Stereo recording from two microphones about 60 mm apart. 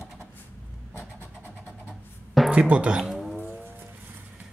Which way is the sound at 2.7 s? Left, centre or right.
Centre.